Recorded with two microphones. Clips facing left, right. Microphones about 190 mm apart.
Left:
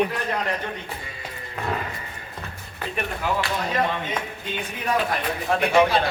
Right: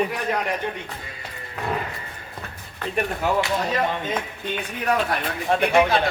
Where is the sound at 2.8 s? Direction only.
10° left (ahead or behind).